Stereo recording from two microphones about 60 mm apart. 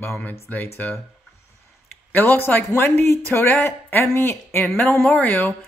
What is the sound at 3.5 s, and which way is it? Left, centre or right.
Speech, left.